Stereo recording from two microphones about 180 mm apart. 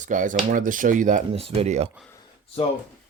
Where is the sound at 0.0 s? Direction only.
45° right (ahead or behind).